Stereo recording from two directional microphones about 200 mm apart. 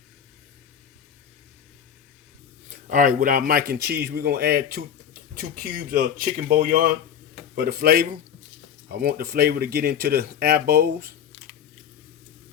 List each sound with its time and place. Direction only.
2.6 s speech: 40° right (ahead or behind)